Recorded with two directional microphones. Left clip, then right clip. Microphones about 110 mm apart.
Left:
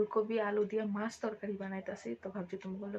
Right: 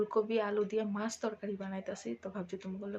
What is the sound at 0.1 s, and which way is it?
Speech, 5° right (ahead or behind).